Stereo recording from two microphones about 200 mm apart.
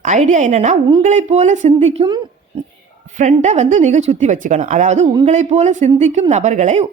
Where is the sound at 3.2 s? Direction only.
35° right (ahead or behind).